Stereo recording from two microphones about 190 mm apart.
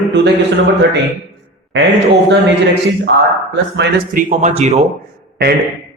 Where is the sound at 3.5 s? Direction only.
65° right (ahead or behind).